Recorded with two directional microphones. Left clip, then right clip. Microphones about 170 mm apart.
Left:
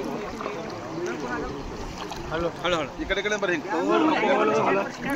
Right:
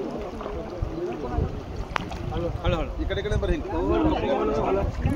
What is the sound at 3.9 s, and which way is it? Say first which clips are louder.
Speech: left 3 dB; 30° left (ahead or behind).